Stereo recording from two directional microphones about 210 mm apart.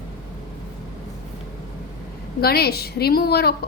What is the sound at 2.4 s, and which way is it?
A woman's voice, 50° left (ahead or behind).